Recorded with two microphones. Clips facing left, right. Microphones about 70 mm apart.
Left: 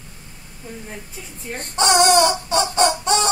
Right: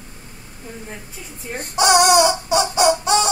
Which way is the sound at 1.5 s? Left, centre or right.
Centre.